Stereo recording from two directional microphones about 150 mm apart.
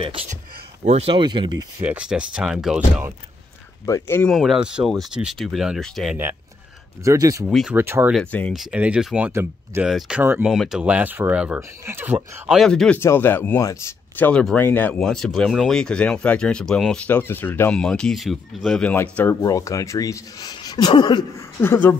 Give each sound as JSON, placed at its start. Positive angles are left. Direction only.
{"t": 0.8, "sound": "speech", "side_deg": -40}
{"t": 1.8, "sound": "speech", "side_deg": -10}
{"t": 3.8, "sound": "speech", "side_deg": 20}
{"t": 4.2, "sound": "speech", "side_deg": 0}
{"t": 7.1, "sound": "speech", "side_deg": -20}
{"t": 7.4, "sound": "speech", "side_deg": -5}
{"t": 7.7, "sound": "speech", "side_deg": -15}
{"t": 8.1, "sound": "speech", "side_deg": 10}
{"t": 8.5, "sound": "speech", "side_deg": -5}
{"t": 13.0, "sound": "speech", "side_deg": 15}
{"t": 14.1, "sound": "speech", "side_deg": 10}
{"t": 21.5, "sound": "speech", "side_deg": 15}